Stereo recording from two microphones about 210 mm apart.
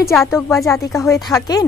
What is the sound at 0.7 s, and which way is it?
Speech, 15° left (ahead or behind).